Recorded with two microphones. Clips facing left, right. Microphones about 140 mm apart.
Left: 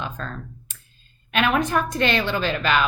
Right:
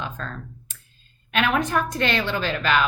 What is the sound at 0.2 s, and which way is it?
Speech, 20° left (ahead or behind).